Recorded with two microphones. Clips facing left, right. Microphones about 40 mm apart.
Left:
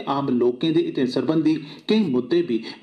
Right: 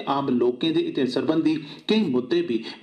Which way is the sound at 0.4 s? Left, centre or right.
Right.